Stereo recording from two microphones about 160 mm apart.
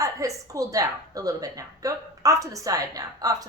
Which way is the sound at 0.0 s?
20° right (ahead or behind).